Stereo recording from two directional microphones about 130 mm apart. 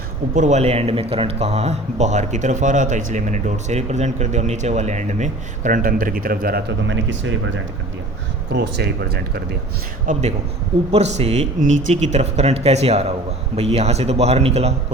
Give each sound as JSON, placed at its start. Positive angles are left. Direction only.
{"t": 0.3, "sound": "speech", "side_deg": -65}
{"t": 10.1, "sound": "speech", "side_deg": -60}